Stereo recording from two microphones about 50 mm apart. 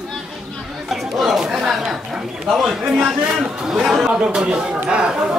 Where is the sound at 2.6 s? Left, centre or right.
Centre.